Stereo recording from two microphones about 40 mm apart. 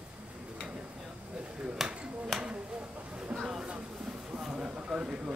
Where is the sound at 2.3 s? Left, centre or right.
Centre.